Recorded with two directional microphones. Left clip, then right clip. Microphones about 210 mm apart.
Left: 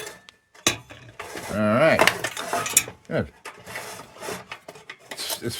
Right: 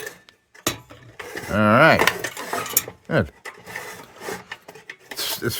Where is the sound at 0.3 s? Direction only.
15° left (ahead or behind).